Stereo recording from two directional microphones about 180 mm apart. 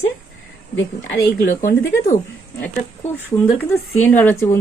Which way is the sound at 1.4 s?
55° left (ahead or behind).